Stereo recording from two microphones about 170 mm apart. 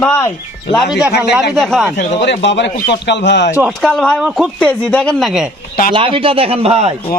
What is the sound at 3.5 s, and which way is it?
Speech, centre (ahead or behind).